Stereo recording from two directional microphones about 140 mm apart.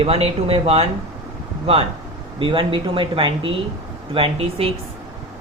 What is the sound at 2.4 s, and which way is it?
Speech, 40° right (ahead or behind).